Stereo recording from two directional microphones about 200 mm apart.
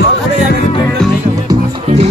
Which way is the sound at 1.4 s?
30° right (ahead or behind).